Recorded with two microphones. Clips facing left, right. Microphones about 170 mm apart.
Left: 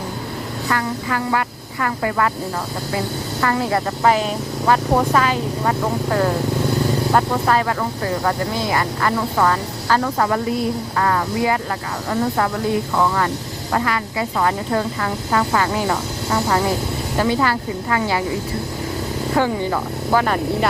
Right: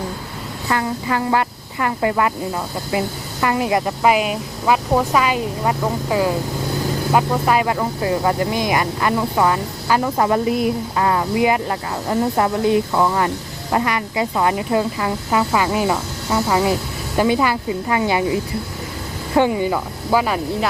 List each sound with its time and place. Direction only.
0.7 s speech: 20° right (ahead or behind)
3.4 s speech: 15° right (ahead or behind)
19.3 s speech: 20° right (ahead or behind)
19.7 s speech: 5° right (ahead or behind)